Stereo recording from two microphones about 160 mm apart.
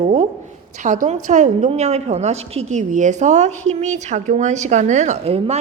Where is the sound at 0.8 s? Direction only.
55° right (ahead or behind).